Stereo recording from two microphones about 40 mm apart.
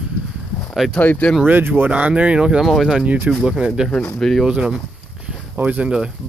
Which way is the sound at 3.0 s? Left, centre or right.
Right.